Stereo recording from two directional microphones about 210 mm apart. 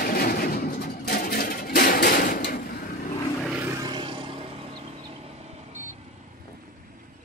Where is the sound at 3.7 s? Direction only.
20° right (ahead or behind); by 5.9 s 35° right (ahead or behind).